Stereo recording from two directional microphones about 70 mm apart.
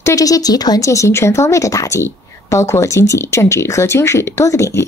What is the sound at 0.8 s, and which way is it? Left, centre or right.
A woman's voice, left.